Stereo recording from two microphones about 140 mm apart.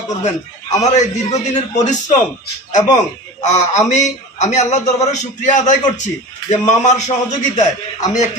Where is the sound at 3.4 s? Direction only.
55° left (ahead or behind).